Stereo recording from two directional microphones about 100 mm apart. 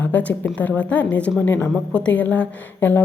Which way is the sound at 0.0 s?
15° left (ahead or behind).